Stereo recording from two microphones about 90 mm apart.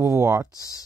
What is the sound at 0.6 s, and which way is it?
Speech, 40° left (ahead or behind).